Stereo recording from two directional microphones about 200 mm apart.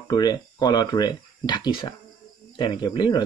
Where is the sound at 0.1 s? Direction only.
20° left (ahead or behind).